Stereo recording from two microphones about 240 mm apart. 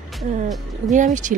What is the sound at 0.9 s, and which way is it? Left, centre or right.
Speech, right.